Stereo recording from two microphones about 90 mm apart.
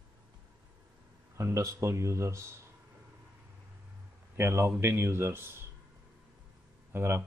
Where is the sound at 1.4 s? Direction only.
35° right (ahead or behind).